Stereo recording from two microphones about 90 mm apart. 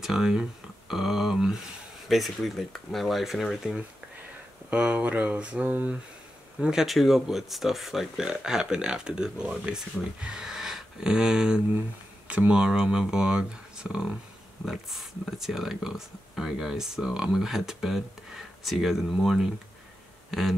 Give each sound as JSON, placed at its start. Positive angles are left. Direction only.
{"t": 0.0, "sound": "speech", "side_deg": -5}
{"t": 4.6, "sound": "speech", "side_deg": -15}
{"t": 20.2, "sound": "a sound", "side_deg": 0}